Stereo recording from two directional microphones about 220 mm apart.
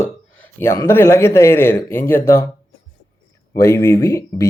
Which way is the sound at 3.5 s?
10° left (ahead or behind).